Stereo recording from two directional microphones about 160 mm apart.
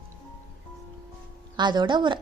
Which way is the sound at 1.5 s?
30° right (ahead or behind).